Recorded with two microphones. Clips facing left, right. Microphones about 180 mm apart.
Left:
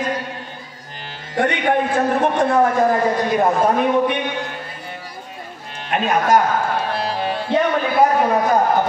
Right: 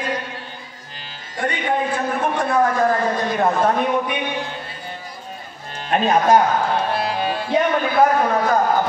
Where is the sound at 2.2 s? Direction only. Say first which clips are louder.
Left 1 dB; 30° left (ahead or behind).